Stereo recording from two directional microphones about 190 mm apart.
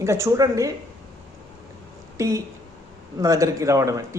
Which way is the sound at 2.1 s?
15° right (ahead or behind).